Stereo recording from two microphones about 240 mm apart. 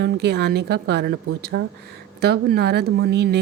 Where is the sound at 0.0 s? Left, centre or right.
Right.